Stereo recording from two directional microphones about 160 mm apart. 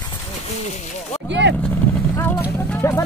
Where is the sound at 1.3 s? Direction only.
90° right.